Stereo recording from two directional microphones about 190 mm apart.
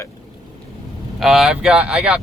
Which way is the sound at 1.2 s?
Centre (ahead or behind).